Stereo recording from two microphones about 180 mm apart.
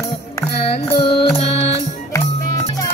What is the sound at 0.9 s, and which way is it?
Music, 30° left (ahead or behind).